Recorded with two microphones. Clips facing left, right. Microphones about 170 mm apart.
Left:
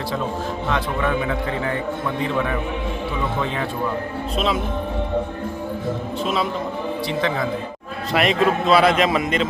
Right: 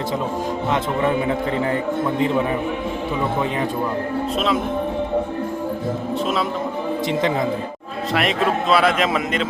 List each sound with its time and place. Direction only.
0.7 s a man's voice: 25° right (ahead or behind)
4.4 s a man's voice: centre (ahead or behind)
7.1 s a man's voice: 20° right (ahead or behind)
8.1 s a man's voice: centre (ahead or behind)